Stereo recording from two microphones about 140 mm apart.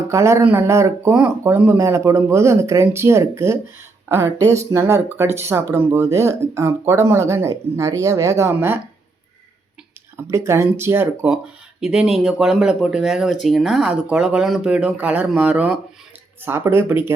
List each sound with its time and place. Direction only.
0.1 s speech: 20° right (ahead or behind)
10.2 s speech: 20° right (ahead or behind)